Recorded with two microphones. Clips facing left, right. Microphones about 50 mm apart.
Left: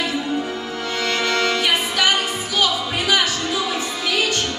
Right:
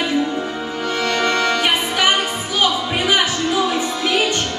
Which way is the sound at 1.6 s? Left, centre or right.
Right.